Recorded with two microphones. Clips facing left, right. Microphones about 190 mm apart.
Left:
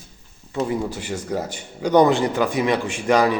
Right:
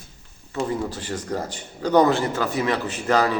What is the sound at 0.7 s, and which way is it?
Speech, 10° left (ahead or behind).